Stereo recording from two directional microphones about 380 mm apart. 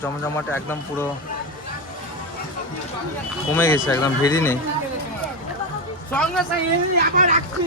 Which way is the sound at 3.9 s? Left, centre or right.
Centre.